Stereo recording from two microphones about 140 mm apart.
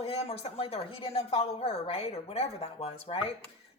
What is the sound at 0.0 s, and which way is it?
A woman's voice, 45° left (ahead or behind).